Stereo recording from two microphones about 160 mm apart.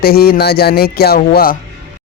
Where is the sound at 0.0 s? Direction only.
70° left (ahead or behind).